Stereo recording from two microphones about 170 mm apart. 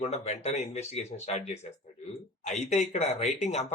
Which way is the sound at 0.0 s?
40° left (ahead or behind).